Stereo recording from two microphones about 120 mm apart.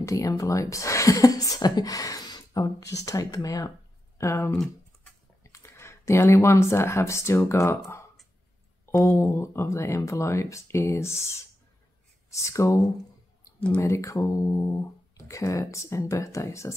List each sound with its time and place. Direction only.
0.0 s speech: 25° left (ahead or behind)
4.5 s computer keyboard: 5° left (ahead or behind)
5.4 s speech: 25° left (ahead or behind)